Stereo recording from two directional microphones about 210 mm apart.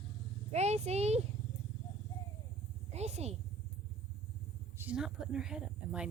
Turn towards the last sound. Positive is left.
turn(degrees=-5)  # may be behind; listen again after turning